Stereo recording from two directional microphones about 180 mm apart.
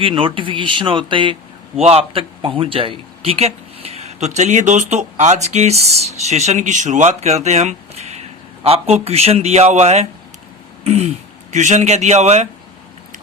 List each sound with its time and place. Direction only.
0.0 s a man's voice: 30° right (ahead or behind)